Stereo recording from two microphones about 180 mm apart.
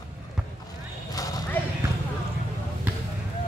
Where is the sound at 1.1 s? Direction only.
20° left (ahead or behind).